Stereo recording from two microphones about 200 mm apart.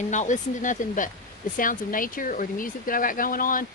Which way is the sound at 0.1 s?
40° left (ahead or behind).